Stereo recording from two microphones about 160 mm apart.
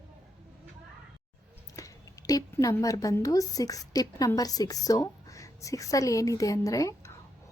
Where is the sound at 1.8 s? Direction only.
20° left (ahead or behind).